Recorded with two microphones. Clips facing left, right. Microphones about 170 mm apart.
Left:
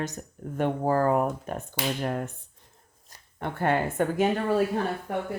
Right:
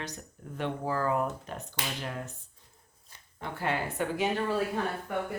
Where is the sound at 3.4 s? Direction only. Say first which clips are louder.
Left 6 dB; 55° left (ahead or behind).